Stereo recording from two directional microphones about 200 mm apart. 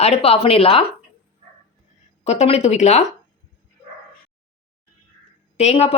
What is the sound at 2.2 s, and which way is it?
Speech, 35° left (ahead or behind).